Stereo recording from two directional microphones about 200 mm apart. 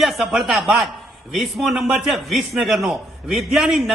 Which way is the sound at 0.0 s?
Centre (ahead or behind).